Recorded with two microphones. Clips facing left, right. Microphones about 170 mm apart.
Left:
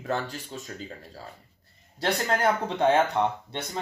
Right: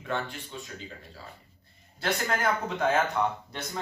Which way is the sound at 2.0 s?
30° left (ahead or behind).